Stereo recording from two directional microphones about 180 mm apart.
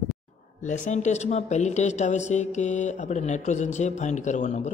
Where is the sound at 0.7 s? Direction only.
40° left (ahead or behind).